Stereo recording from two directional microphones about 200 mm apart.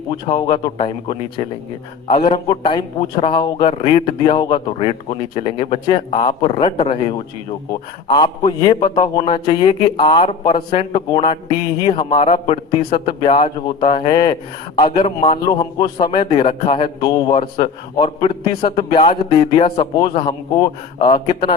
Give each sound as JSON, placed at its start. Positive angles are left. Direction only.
{"t": 0.1, "sound": "a man's voice", "side_deg": 25}